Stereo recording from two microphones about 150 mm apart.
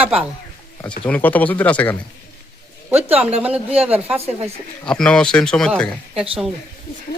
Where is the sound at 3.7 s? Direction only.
40° right (ahead or behind).